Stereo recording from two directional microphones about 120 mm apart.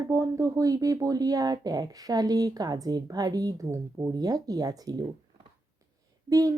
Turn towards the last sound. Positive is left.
turn(degrees=-30)  # may be behind; listen again after turning